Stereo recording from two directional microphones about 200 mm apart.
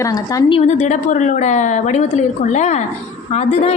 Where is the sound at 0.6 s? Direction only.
35° left (ahead or behind).